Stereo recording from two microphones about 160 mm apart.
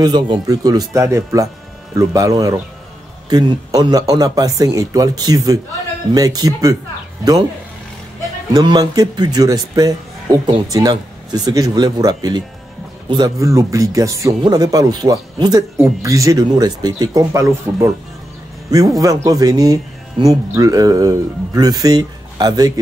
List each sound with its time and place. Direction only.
0.0 s speech: 25° right (ahead or behind)
8.5 s speech: 25° right (ahead or behind)